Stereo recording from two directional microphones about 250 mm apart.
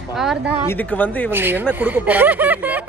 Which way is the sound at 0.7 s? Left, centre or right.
Centre.